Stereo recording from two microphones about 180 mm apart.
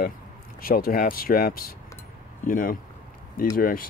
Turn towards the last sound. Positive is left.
turn(degrees=55)  # may be behind; listen again after turning